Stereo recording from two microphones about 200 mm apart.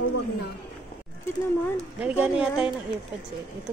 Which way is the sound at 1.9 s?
5° right (ahead or behind).